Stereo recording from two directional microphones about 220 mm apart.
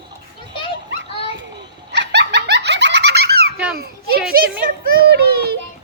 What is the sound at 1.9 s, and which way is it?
Giggle, 50° right (ahead or behind).